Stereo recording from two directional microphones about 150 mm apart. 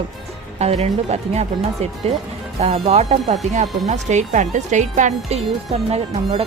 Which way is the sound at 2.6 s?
40° right (ahead or behind).